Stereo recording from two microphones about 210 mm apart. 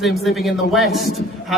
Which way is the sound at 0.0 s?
Centre (ahead or behind).